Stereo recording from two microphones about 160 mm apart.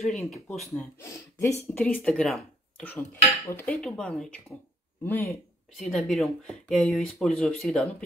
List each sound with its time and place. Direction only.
0.0 s speech: 5° left (ahead or behind)
1.0 s speech: 20° left (ahead or behind)
5.8 s speech: centre (ahead or behind)